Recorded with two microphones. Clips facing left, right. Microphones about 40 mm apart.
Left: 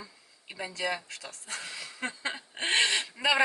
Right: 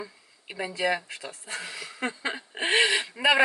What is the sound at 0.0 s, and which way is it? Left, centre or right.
Speech, right.